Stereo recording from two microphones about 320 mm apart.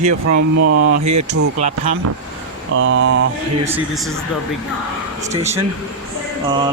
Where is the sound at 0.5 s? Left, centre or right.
Right.